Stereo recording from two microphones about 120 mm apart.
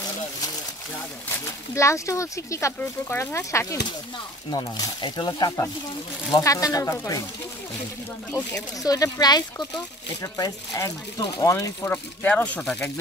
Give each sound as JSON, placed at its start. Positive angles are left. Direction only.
{"t": 1.3, "sound": "speech", "side_deg": 25}
{"t": 8.7, "sound": "speech", "side_deg": 30}